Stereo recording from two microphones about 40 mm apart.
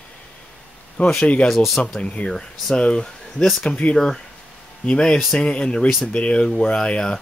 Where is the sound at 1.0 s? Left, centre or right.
Left.